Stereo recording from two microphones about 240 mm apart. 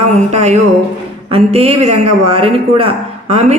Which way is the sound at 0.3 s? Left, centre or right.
Right.